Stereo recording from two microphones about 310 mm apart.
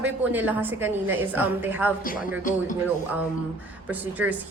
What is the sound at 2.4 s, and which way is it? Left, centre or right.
Speech, left.